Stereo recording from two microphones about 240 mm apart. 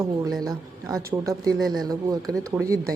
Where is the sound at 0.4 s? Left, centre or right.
Centre.